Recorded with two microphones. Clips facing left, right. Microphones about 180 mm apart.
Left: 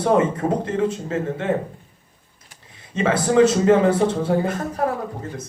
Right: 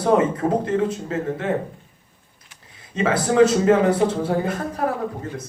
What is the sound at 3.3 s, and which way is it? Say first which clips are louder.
Speech: left 1 dB; 30° left (ahead or behind).